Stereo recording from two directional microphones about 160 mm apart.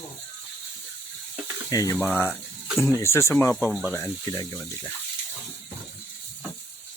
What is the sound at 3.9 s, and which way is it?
Speech, 15° left (ahead or behind).